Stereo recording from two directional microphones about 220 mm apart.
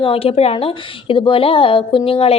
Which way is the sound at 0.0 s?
25° left (ahead or behind).